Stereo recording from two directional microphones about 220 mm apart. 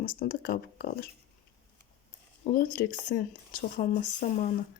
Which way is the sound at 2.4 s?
40° left (ahead or behind).